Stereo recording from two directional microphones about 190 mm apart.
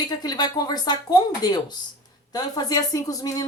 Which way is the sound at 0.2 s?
20° left (ahead or behind).